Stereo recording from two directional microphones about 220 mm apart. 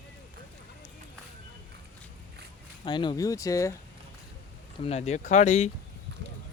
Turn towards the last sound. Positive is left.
turn(degrees=30)  # may be behind; listen again after turning